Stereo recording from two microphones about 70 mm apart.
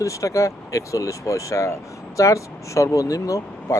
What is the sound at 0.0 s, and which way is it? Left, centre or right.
Speech, left.